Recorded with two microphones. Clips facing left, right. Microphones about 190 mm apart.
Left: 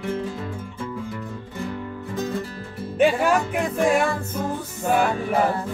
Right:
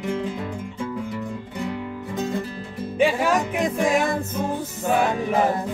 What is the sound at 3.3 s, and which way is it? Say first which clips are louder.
Music: even; 15° right (ahead or behind).